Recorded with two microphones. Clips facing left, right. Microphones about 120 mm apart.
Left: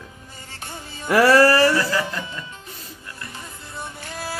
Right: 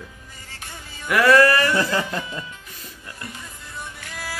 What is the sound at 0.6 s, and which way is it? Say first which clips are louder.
Music: left 3 dB; 30° left (ahead or behind).